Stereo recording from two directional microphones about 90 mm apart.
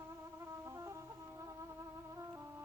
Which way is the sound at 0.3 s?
30° right (ahead or behind).